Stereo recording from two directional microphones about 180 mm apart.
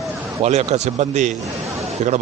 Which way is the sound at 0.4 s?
40° right (ahead or behind).